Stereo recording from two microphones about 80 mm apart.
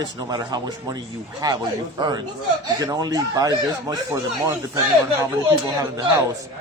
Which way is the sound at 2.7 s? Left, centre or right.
Right.